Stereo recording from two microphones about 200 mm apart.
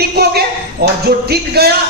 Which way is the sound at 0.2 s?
50° right (ahead or behind).